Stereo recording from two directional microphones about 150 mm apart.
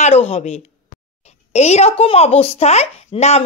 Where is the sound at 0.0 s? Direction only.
45° left (ahead or behind).